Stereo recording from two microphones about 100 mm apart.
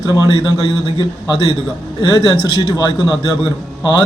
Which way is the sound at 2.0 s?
45° left (ahead or behind).